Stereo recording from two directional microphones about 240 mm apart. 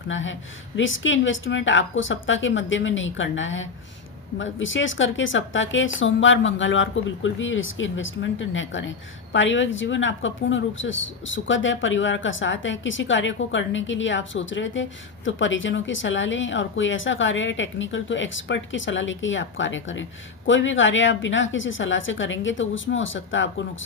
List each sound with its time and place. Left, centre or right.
0.1 s speech: left